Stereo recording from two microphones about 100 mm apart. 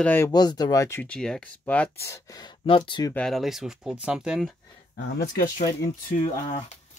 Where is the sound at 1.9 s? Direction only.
30° left (ahead or behind).